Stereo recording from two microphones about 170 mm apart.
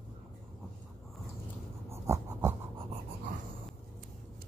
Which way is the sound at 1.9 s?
15° right (ahead or behind).